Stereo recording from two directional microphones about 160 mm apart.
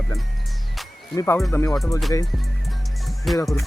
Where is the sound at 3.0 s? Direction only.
Centre (ahead or behind).